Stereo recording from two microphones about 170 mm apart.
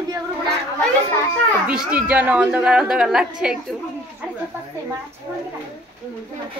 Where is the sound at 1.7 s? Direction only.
5° right (ahead or behind).